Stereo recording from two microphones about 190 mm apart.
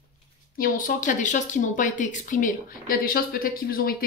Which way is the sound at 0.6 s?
45° left (ahead or behind).